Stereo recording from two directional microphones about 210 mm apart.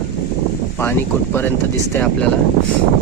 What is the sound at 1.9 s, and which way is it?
Speech, 5° left (ahead or behind).